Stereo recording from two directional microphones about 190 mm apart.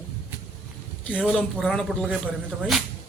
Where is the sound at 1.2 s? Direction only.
Centre (ahead or behind).